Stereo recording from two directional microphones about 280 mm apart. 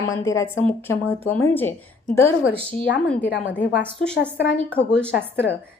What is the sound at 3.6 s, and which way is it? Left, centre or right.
A woman's voice, left.